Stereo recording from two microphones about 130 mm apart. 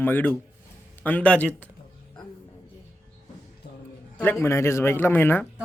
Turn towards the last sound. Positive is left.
turn(degrees=15)  # may be behind; listen again after turning